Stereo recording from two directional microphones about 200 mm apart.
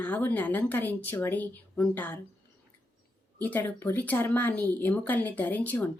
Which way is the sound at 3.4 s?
10° left (ahead or behind).